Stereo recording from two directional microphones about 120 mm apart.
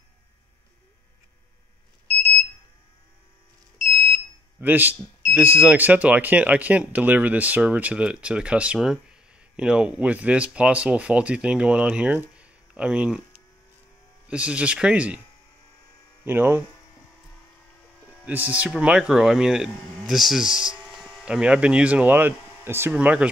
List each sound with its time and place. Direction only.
4.6 s speech: 15° right (ahead or behind)
14.2 s speech: 10° right (ahead or behind)
16.3 s speech: 15° right (ahead or behind)
18.5 s speech: 10° right (ahead or behind)